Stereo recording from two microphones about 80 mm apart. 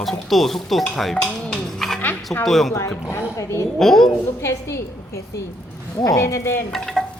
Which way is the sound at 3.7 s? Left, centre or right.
Centre.